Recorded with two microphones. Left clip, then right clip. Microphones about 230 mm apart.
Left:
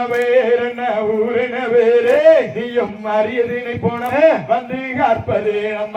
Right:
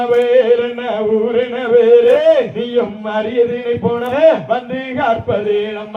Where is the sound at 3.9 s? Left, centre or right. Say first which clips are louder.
Right 1 dB; right.